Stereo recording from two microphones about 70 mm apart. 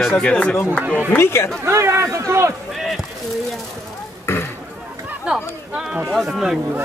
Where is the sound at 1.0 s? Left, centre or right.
Left.